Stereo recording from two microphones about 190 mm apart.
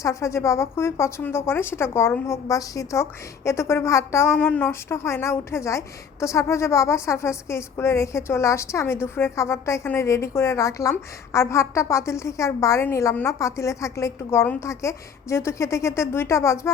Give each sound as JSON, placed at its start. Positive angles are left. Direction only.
{"t": 0.0, "sound": "speech", "side_deg": 15}